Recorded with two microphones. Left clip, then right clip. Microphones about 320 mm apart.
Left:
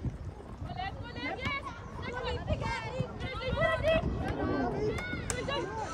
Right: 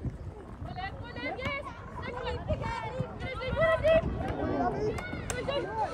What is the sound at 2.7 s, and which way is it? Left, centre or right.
Run, centre.